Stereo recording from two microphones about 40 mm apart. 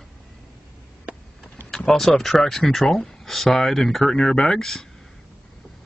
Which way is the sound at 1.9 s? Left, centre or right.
Centre.